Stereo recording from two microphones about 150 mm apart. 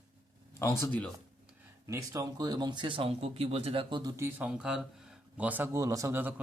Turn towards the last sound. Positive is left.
turn(degrees=-15)  # may be behind; listen again after turning